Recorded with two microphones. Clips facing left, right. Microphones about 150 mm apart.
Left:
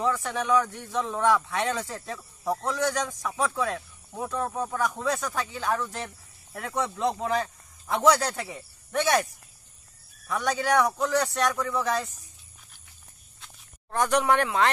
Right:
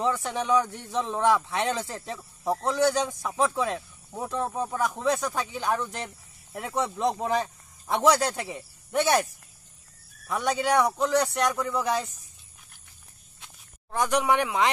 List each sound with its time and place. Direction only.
0.0 s speech: 25° right (ahead or behind)
2.1 s speech: 15° right (ahead or behind)
2.6 s a man's voice: 25° right (ahead or behind)
10.5 s a man's voice: centre (ahead or behind)
10.8 s a man's voice: 15° right (ahead or behind)
13.9 s speech: 10° right (ahead or behind)